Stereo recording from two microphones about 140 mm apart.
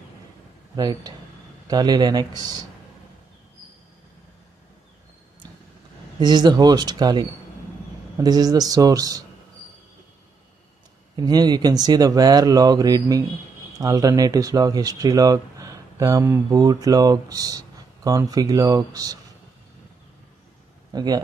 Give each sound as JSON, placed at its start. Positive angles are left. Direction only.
{"t": 0.7, "sound": "speech", "side_deg": -30}
{"t": 6.1, "sound": "speech", "side_deg": -30}
{"t": 11.1, "sound": "speech", "side_deg": -30}
{"t": 20.9, "sound": "speech", "side_deg": -30}